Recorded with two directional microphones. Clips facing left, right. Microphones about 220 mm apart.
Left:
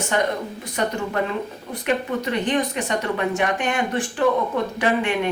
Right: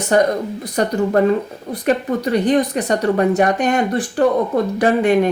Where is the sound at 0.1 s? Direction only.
40° right (ahead or behind).